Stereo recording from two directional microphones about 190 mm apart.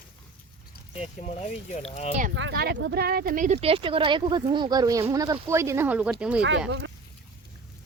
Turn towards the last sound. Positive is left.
turn(degrees=-65)  # may be behind; listen again after turning